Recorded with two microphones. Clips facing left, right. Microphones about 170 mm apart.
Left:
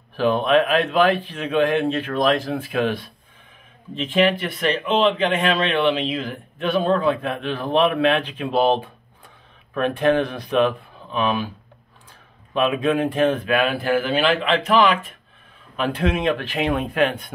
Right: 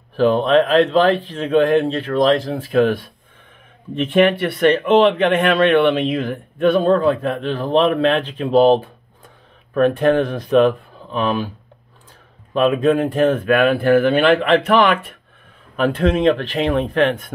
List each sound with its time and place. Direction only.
0.1 s speech: 35° right (ahead or behind)
2.6 s speech: 40° right (ahead or behind)
3.9 s speech: 55° right (ahead or behind)
6.8 s speech: 40° right (ahead or behind)
12.5 s speech: 40° right (ahead or behind); by 15.0 s 60° right (ahead or behind)
15.7 s speech: 40° right (ahead or behind)